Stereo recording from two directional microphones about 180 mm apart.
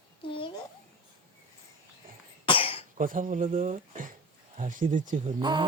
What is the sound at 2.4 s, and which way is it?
Cough, 30° left (ahead or behind).